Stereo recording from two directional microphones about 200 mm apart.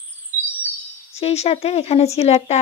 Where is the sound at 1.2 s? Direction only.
30° left (ahead or behind).